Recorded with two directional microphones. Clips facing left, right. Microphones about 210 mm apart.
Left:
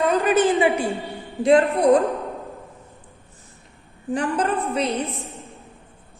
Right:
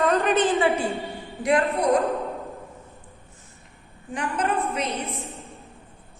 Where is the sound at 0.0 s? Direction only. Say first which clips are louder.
Left 2 dB; centre (ahead or behind).